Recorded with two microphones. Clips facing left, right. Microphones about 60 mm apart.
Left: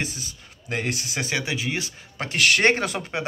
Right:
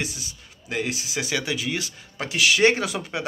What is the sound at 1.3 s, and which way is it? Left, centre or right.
Speech, left.